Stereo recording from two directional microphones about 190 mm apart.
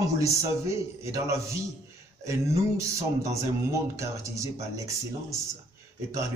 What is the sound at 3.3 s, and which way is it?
Speech, 15° right (ahead or behind).